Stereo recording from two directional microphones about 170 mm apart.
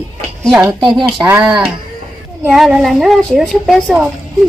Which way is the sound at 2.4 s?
Centre (ahead or behind).